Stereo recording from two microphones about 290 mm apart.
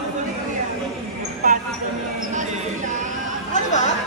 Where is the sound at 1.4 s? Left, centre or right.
Right.